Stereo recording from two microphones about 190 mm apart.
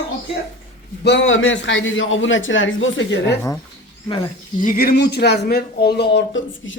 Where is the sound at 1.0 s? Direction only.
70° left (ahead or behind).